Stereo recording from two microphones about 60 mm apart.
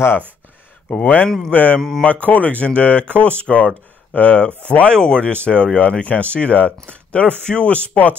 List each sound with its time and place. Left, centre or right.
0.9 s speech: left
1.8 s speech: centre
2.0 s speech: left